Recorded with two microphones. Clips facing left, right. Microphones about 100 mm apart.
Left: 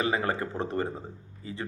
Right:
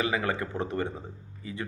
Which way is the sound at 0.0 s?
35° left (ahead or behind).